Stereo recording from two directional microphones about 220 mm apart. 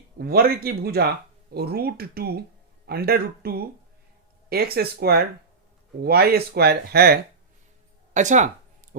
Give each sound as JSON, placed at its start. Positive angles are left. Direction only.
{"t": 0.2, "sound": "speech", "side_deg": -45}
{"t": 8.1, "sound": "speech", "side_deg": -35}